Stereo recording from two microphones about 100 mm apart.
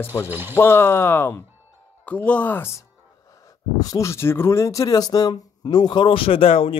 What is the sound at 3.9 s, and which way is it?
Speech, 30° left (ahead or behind).